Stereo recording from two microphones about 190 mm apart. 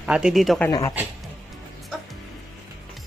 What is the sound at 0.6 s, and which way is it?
Speech, 15° left (ahead or behind).